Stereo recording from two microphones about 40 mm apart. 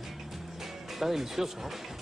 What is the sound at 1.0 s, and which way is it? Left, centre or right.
Speech, centre.